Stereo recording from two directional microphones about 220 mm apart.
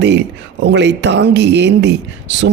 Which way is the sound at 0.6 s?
55° right (ahead or behind).